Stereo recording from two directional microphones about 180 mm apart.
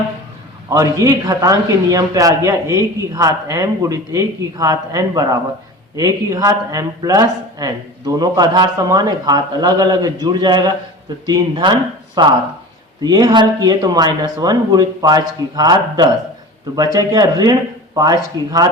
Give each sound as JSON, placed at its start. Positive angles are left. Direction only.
{"t": 0.7, "sound": "speech", "side_deg": -20}